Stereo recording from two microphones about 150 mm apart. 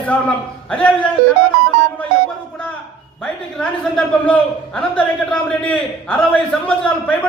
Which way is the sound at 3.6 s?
5° left (ahead or behind).